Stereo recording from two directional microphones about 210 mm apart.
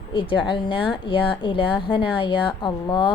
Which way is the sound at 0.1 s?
25° left (ahead or behind).